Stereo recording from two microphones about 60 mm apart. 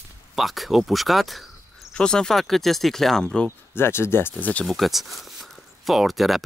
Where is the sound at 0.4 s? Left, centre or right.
Centre.